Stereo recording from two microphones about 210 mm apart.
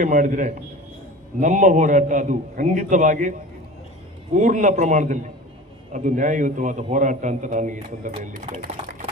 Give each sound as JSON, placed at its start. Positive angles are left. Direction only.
{"t": 0.0, "sound": "a man's voice", "side_deg": -40}
{"t": 4.4, "sound": "a man's voice", "side_deg": -35}
{"t": 8.6, "sound": "a sound", "side_deg": -40}